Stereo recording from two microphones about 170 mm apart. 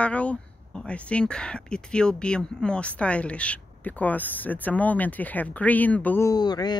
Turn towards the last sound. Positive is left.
turn(degrees=25)  # may be behind; listen again after turning